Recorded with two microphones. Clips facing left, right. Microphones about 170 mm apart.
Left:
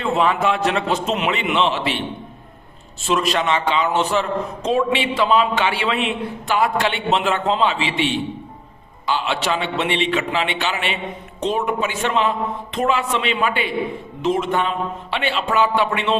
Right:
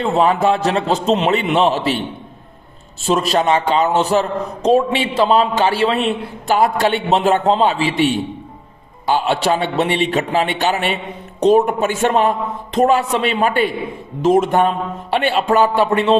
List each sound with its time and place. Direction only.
0.0 s a man's voice: 35° right (ahead or behind)
3.1 s a man's voice: 35° right (ahead or behind)